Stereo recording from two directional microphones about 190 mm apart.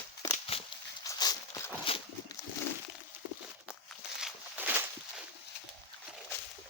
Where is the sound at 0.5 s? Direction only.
30° left (ahead or behind).